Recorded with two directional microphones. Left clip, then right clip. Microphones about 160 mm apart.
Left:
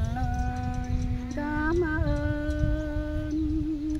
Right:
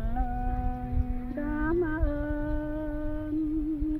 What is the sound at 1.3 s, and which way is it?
Music, 5° left (ahead or behind).